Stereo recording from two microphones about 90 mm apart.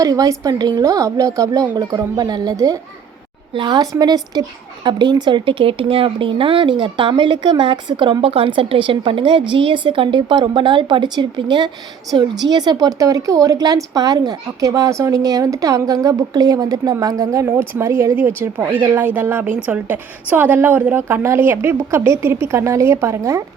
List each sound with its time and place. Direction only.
0.0 s a woman's voice: 40° right (ahead or behind)
3.5 s a woman's voice: 60° right (ahead or behind); by 23.4 s 30° right (ahead or behind)